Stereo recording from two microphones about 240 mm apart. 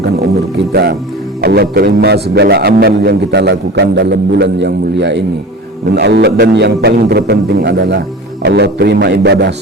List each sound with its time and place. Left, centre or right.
0.7 s a man's voice: right